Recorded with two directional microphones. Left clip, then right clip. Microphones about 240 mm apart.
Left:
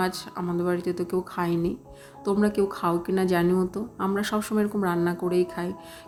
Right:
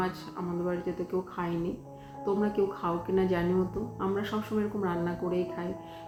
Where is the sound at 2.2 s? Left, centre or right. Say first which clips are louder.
Left 4 dB; left.